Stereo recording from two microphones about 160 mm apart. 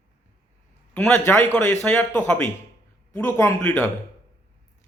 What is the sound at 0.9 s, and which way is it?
A man's voice, 10° left (ahead or behind).